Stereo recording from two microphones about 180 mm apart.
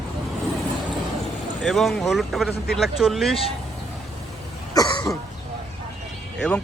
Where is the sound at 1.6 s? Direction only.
Centre (ahead or behind).